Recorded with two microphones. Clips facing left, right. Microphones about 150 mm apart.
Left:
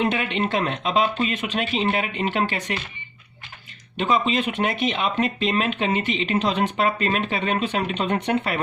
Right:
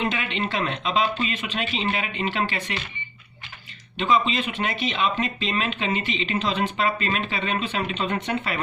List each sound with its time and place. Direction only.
0.0 s speech: 50° left (ahead or behind)
3.9 s speech: 50° left (ahead or behind)